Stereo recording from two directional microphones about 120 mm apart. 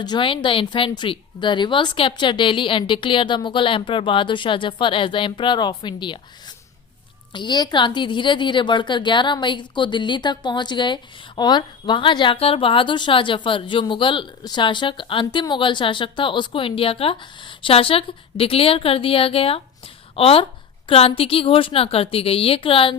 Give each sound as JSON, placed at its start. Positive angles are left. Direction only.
{"t": 0.0, "sound": "a woman's voice", "side_deg": 40}
{"t": 7.3, "sound": "a woman's voice", "side_deg": 35}